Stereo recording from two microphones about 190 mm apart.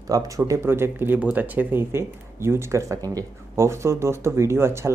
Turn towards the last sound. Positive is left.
turn(degrees=-15)  # may be behind; listen again after turning